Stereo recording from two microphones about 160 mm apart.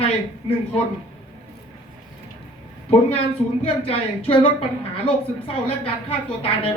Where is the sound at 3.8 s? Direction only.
35° left (ahead or behind).